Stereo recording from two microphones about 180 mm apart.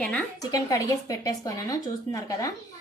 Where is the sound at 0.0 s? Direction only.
5° left (ahead or behind).